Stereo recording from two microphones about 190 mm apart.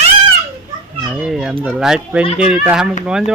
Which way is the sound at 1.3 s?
Centre (ahead or behind).